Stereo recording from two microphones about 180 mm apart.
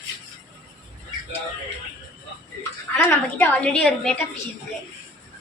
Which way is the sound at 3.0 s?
10° left (ahead or behind).